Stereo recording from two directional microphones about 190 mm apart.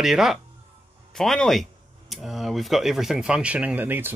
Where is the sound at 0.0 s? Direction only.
Centre (ahead or behind).